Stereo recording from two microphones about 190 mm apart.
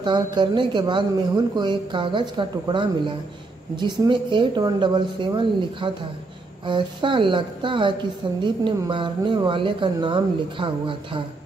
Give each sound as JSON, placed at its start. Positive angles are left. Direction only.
{"t": 0.0, "sound": "speech", "side_deg": -25}